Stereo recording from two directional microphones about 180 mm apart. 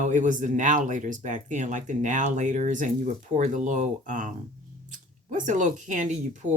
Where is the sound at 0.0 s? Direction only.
45° right (ahead or behind).